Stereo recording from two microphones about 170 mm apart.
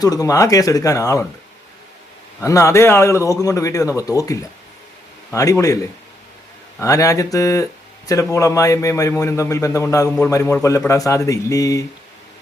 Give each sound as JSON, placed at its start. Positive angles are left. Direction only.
{"t": 0.0, "sound": "speech", "side_deg": 20}
{"t": 2.4, "sound": "a man's voice", "side_deg": 20}